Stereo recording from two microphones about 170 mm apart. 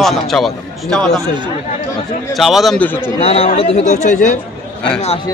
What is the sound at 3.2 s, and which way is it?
Speech, 35° left (ahead or behind).